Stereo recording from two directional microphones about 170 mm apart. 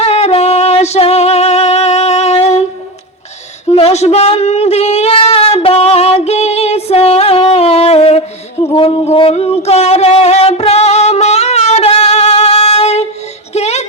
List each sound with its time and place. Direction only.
0.0 s music: 40° left (ahead or behind)
3.7 s a sound: 35° left (ahead or behind)
8.6 s music: 30° left (ahead or behind)